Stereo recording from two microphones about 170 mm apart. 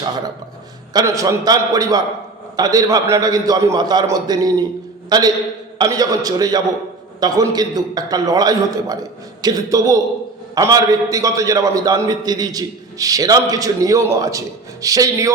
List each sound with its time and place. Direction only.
0.9 s a man's voice: 20° right (ahead or behind)